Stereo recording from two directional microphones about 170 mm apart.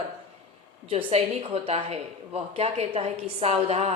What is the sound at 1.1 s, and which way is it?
A woman's voice, 35° right (ahead or behind).